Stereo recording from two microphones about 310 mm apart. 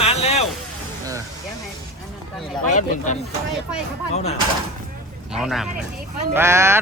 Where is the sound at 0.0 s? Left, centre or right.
Centre.